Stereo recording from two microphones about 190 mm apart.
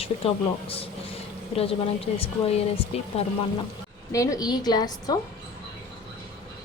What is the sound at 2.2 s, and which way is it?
Speech, 30° left (ahead or behind).